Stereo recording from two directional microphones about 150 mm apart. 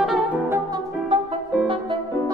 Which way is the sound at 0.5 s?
25° right (ahead or behind).